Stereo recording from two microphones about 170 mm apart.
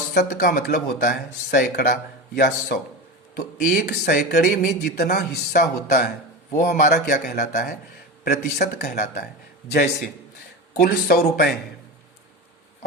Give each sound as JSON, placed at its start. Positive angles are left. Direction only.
{"t": 0.2, "sound": "speech", "side_deg": 55}
{"t": 8.5, "sound": "speech", "side_deg": 65}